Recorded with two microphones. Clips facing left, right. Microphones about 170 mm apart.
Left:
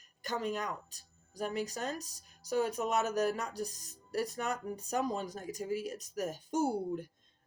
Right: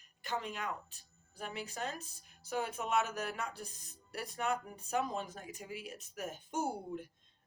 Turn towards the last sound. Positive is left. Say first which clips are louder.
# left 6 dB
turn(degrees=40)  # may be behind; listen again after turning